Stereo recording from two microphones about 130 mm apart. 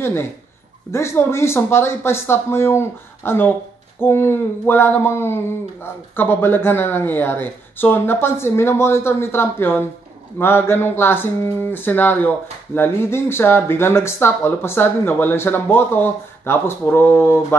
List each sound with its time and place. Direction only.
0.0 s speech: 20° left (ahead or behind)